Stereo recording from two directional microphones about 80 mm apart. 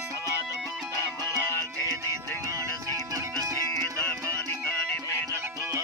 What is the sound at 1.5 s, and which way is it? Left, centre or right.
Music, left.